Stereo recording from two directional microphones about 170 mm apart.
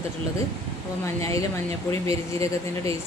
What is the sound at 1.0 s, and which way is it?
Speech, 20° left (ahead or behind).